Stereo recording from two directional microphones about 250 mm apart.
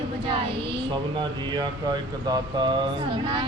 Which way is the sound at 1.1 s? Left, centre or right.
Centre.